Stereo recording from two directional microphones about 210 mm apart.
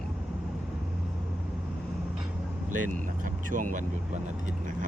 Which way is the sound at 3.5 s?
40° right (ahead or behind).